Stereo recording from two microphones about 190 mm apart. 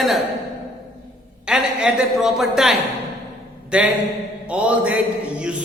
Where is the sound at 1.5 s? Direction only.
5° right (ahead or behind).